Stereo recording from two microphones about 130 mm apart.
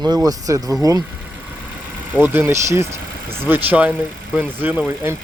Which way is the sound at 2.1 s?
15° right (ahead or behind).